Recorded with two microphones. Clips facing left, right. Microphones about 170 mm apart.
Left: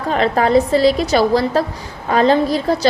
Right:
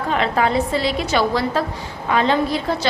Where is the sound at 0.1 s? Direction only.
40° left (ahead or behind).